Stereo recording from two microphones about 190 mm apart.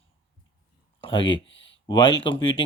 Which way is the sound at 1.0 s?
25° left (ahead or behind).